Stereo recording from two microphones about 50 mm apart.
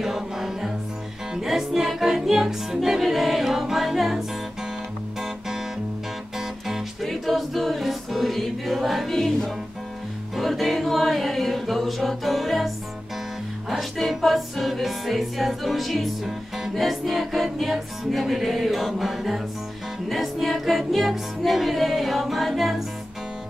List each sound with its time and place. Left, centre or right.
0.0 s music: centre
6.7 s music: centre
9.1 s music: centre